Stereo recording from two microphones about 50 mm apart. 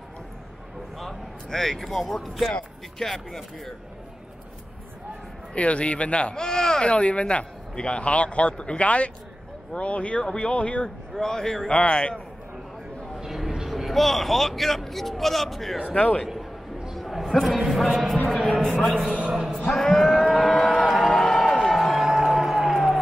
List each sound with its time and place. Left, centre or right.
0.9 s speech: centre
5.5 s speech: left
11.1 s speech: centre
11.7 s speech: left
13.2 s a sound: centre
13.7 s speech: centre
15.9 s speech: left
16.9 s a sound: centre
17.6 s speech: centre
18.5 s a sound: centre
19.1 s speech: right
19.7 s speech: centre
20.1 s a sound: centre
21.6 s music: centre